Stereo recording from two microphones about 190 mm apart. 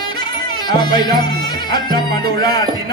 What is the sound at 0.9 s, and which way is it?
Speech, 20° left (ahead or behind).